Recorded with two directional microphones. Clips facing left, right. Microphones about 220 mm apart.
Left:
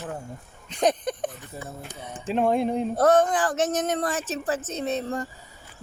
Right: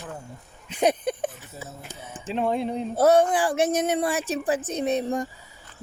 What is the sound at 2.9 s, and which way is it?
Speech, 10° right (ahead or behind).